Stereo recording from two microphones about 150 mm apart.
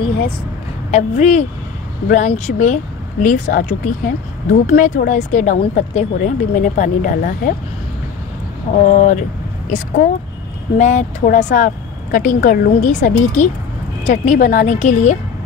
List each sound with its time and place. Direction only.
0.9 s a woman's voice: 50° left (ahead or behind); by 7.5 s 70° left (ahead or behind)
8.8 s speech: 55° left (ahead or behind)
10.8 s a woman's voice: 50° left (ahead or behind)